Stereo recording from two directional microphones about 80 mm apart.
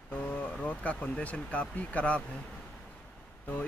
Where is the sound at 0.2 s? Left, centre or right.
Centre.